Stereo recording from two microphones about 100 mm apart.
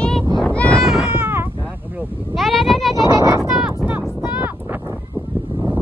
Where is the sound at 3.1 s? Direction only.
30° right (ahead or behind).